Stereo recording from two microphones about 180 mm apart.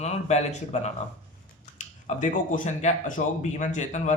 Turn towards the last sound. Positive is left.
turn(degrees=40)  # may be behind; listen again after turning